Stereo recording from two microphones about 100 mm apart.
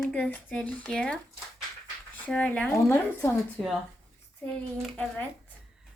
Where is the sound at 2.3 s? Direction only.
10° left (ahead or behind).